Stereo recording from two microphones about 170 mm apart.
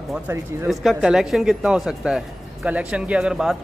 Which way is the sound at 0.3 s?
15° right (ahead or behind).